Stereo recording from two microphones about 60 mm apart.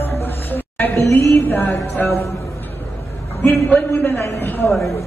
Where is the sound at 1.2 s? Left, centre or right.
Left.